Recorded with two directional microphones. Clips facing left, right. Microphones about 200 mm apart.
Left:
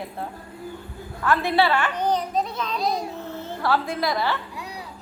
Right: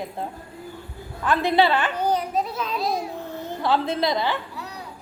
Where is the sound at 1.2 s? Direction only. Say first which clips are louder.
Right 1 dB; 20° right (ahead or behind); by 3.0 s centre (ahead or behind).